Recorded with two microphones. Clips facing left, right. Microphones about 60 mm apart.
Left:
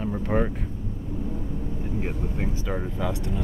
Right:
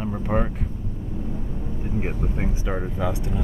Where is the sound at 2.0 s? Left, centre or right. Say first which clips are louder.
Right 3 dB; centre.